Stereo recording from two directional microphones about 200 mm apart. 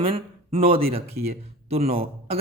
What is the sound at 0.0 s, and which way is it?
A man's voice, 30° right (ahead or behind).